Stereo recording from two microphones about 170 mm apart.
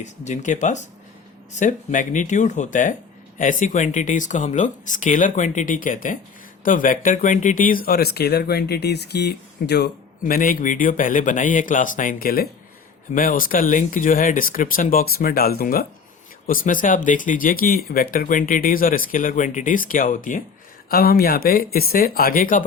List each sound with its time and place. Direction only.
0.0 s speech: 45° left (ahead or behind)
20.9 s speech: 60° left (ahead or behind)